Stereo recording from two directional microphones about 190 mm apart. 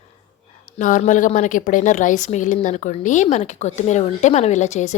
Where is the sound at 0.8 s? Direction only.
40° left (ahead or behind).